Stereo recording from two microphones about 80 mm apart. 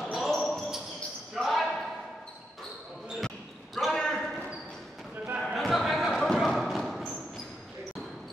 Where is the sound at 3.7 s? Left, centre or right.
Centre.